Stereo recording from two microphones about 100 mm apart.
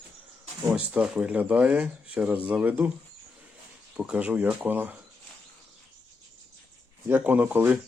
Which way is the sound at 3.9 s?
10° right (ahead or behind).